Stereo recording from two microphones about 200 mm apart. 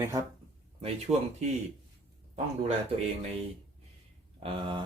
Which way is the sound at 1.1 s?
30° right (ahead or behind).